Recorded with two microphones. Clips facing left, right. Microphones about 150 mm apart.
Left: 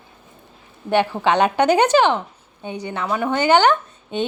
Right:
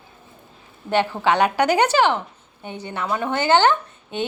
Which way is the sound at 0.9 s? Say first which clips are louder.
Left 2 dB; 15° left (ahead or behind).